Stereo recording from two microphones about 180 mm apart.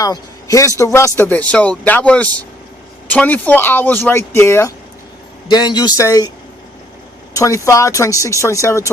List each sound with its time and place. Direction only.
0.0 s a man's voice: 20° left (ahead or behind)
7.3 s speech: 15° left (ahead or behind)